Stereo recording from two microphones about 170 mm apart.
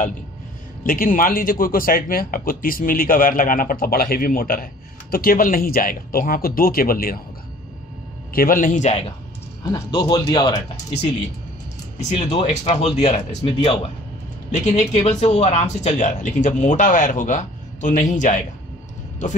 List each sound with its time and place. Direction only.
0.8 s a man's voice: 55° left (ahead or behind)
8.3 s a man's voice: 60° left (ahead or behind)
9.7 s speech: 25° left (ahead or behind)
12.0 s speech: 40° left (ahead or behind)
14.5 s a man's voice: 40° left (ahead or behind)